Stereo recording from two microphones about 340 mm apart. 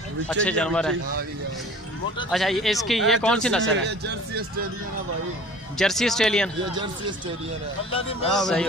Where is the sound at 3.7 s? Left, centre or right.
Right.